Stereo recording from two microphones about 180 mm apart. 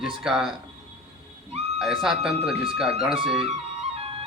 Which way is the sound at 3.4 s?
35° right (ahead or behind).